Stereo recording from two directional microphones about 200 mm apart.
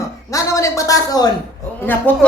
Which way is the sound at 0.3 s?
15° left (ahead or behind).